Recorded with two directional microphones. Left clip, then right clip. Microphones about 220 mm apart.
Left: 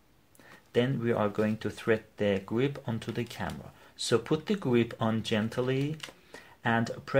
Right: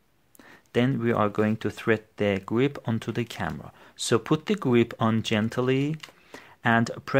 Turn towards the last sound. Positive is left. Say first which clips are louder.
# right 6 dB
turn(degrees=-45)  # may be behind; listen again after turning